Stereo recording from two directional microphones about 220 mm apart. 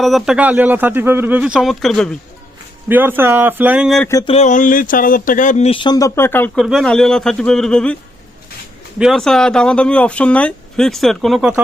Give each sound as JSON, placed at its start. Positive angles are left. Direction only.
{"t": 0.0, "sound": "speech", "side_deg": 0}
{"t": 2.9, "sound": "speech", "side_deg": -10}
{"t": 4.1, "sound": "speech", "side_deg": 15}
{"t": 4.4, "sound": "speech", "side_deg": 35}
{"t": 9.0, "sound": "speech", "side_deg": 0}